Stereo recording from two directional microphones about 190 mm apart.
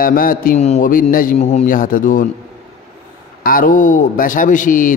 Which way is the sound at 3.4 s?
45° left (ahead or behind).